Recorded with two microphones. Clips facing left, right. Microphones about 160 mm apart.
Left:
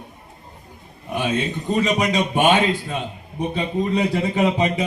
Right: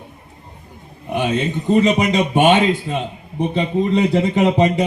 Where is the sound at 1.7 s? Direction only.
25° right (ahead or behind).